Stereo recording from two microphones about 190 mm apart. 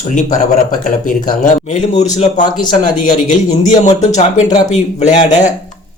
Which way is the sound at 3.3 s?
40° left (ahead or behind).